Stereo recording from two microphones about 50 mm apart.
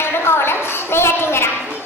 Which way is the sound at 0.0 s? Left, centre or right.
Left.